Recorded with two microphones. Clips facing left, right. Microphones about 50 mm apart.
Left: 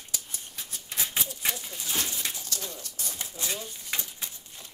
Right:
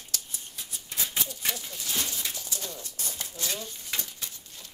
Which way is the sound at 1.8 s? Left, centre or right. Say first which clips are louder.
Left 2 dB; left.